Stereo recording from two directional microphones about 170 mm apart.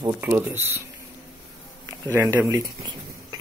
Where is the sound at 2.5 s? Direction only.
20° right (ahead or behind).